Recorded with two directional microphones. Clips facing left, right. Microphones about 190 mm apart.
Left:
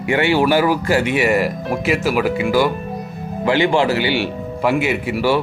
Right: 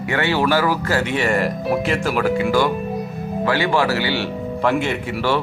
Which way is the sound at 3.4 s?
20° left (ahead or behind).